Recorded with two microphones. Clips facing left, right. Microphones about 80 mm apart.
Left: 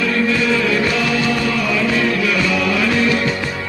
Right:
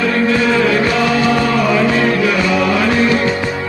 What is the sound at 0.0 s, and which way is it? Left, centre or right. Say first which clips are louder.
Music: right 3 dB; right.